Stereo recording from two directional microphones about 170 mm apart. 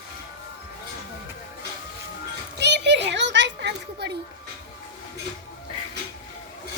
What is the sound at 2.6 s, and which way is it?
Children playing, 85° right.